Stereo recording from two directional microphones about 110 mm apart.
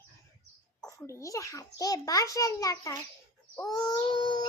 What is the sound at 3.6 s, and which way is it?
Child singing, 35° left (ahead or behind).